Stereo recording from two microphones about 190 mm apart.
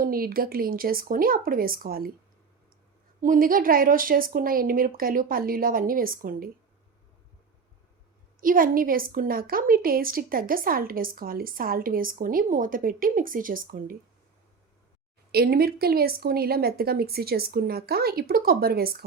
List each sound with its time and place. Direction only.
0.0 s a woman's voice: 50° right (ahead or behind)
3.2 s a woman's voice: 45° right (ahead or behind)
8.4 s a woman's voice: 45° right (ahead or behind)
15.3 s a woman's voice: 55° right (ahead or behind)